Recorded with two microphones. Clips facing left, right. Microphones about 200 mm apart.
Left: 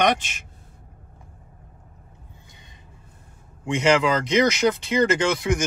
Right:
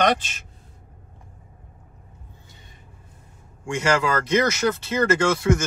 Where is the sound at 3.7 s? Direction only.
20° left (ahead or behind).